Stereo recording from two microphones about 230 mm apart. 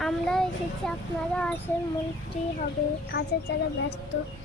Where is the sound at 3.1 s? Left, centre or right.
Left.